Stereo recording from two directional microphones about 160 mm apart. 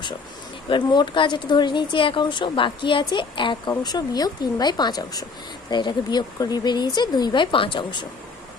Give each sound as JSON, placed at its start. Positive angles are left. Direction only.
{"t": 0.7, "sound": "speech", "side_deg": 30}